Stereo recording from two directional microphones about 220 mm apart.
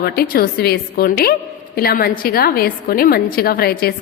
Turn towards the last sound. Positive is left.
turn(degrees=45)  # may be behind; listen again after turning